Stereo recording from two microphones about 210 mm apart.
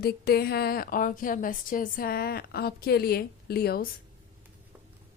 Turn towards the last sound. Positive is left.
turn(degrees=50)  # may be behind; listen again after turning